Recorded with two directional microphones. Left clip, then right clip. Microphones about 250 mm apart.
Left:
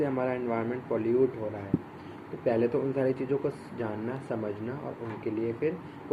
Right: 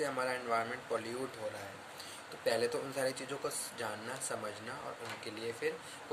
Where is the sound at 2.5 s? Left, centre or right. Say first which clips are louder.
Left 7 dB; right.